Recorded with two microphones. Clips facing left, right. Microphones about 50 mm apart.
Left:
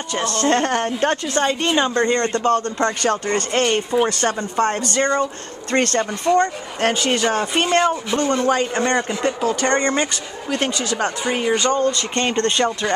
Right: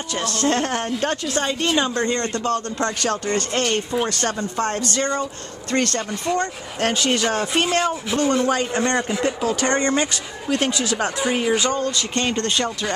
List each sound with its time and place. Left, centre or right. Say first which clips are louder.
0.1 s speech: left 3 dB; centre
5.7 s speech: left 2 dB; left
5.9 s speech: left 6 dB; centre